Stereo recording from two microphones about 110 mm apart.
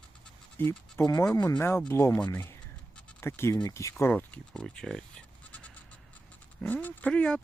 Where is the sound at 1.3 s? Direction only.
35° left (ahead or behind).